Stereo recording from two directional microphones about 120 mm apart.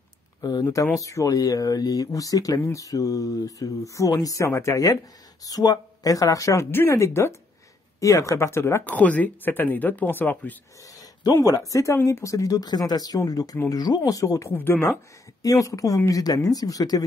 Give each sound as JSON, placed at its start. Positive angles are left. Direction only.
{"t": 0.4, "sound": "speech", "side_deg": 30}
{"t": 11.0, "sound": "speech", "side_deg": 30}
{"t": 15.4, "sound": "speech", "side_deg": 30}